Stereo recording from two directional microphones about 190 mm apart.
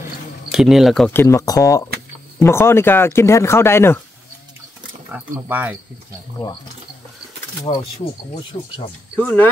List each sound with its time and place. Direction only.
0.5 s speech: centre (ahead or behind)
5.1 s speech: 10° right (ahead or behind)
7.7 s speech: 25° left (ahead or behind)
9.2 s speech: 10° left (ahead or behind)